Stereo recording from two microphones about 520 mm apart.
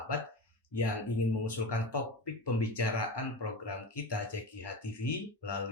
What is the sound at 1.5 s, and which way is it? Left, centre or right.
Speech, left.